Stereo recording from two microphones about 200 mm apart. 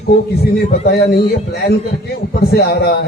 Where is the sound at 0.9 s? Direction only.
50° left (ahead or behind).